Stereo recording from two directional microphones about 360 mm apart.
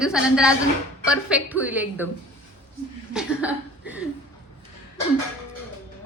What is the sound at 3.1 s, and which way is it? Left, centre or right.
Chuckle, centre.